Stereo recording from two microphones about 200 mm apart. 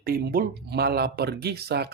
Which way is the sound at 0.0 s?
50° right (ahead or behind).